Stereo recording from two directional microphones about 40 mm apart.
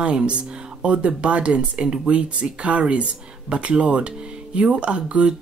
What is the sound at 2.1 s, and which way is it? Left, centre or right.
Speech, right.